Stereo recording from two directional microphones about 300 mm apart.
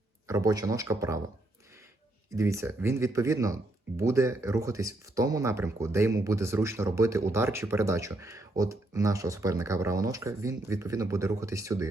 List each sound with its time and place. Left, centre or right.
0.3 s speech: centre
2.3 s speech: centre